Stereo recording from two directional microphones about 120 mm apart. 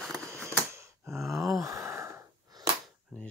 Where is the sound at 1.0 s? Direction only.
Centre (ahead or behind).